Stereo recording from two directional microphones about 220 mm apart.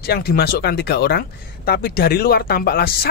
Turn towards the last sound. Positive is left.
turn(degrees=45)  # may be behind; listen again after turning